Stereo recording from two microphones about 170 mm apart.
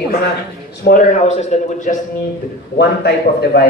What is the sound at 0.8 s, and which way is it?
A man's voice, 55° left (ahead or behind).